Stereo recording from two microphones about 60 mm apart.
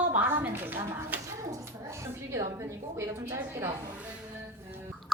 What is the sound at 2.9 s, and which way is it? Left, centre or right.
Speech, right.